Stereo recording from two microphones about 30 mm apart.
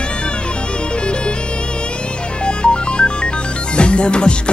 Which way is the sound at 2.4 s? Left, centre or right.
Left.